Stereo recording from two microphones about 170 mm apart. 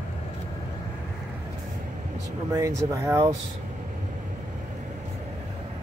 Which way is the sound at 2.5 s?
20° right (ahead or behind).